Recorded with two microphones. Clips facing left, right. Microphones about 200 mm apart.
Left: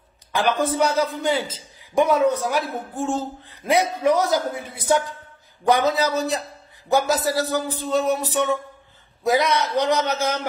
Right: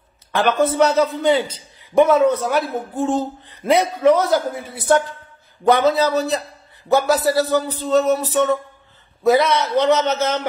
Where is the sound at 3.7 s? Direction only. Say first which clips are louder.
Right 4 dB; 15° left (ahead or behind).